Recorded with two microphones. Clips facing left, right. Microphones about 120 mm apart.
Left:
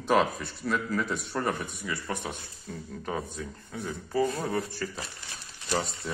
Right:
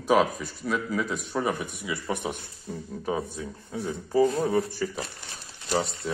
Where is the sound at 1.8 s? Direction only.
15° right (ahead or behind).